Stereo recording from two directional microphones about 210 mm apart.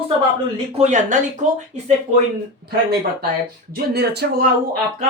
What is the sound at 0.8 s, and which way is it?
Speech, 35° right (ahead or behind).